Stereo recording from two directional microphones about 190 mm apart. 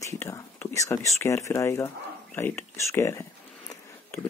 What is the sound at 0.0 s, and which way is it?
Speech, 15° left (ahead or behind).